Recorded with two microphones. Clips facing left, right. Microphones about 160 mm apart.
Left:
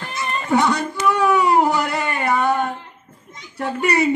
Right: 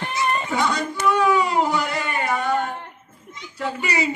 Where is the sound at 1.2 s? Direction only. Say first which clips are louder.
Left 5 dB; 65° left (ahead or behind).